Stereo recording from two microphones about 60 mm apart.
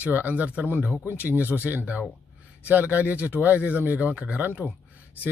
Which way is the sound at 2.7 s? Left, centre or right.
Right.